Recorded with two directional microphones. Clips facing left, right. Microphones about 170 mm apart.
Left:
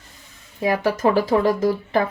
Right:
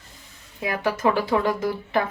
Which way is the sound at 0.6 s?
40° left (ahead or behind).